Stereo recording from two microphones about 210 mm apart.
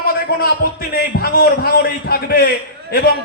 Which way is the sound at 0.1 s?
45° left (ahead or behind).